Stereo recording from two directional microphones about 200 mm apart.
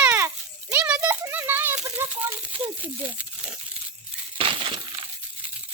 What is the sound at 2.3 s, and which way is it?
Speech, 25° right (ahead or behind).